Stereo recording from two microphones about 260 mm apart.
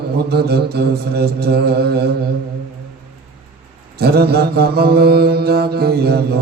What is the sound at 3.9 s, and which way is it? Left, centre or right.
Mantra, right.